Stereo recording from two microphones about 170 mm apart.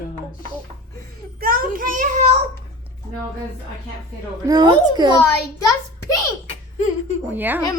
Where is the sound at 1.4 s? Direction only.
55° right (ahead or behind).